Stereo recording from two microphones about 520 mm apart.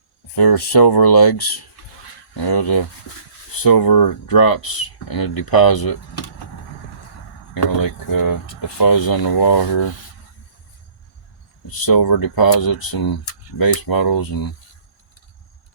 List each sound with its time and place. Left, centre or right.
0.3 s speech: left
7.5 s speech: left
11.9 s speech: left